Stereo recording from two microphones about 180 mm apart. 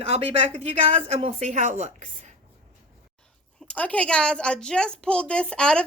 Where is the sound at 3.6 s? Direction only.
5° left (ahead or behind).